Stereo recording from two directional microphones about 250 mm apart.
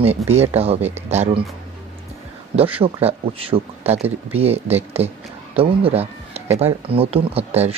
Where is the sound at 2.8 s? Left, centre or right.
Right.